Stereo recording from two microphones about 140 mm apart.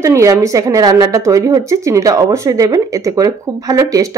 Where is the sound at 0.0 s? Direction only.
20° right (ahead or behind).